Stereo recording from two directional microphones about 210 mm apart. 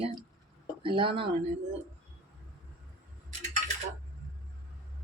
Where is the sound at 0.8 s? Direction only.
25° right (ahead or behind).